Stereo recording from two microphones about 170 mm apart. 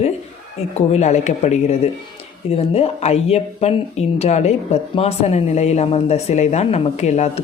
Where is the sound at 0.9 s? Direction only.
45° left (ahead or behind).